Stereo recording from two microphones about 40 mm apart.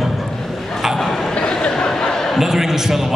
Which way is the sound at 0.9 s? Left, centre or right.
Centre.